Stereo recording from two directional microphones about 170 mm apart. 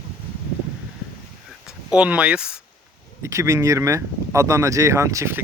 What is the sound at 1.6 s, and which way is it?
Speech, 5° right (ahead or behind).